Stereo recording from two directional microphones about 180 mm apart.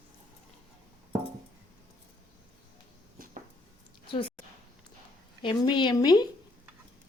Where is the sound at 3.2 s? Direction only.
50° right (ahead or behind).